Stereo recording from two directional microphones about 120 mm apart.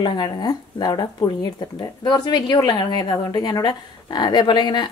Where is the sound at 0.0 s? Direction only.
35° left (ahead or behind).